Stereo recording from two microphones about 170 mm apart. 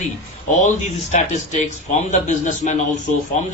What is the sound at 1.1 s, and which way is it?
A man's voice, 45° left (ahead or behind).